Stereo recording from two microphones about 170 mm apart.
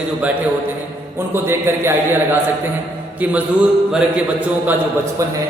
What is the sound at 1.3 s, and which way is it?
Speech, 15° right (ahead or behind).